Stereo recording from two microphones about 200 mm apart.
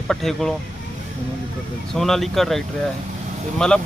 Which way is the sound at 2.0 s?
Centre (ahead or behind).